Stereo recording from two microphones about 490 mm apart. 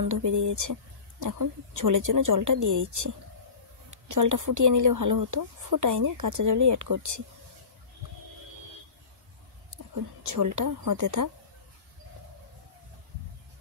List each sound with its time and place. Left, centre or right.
0.0 s speech: right
10.2 s speech: right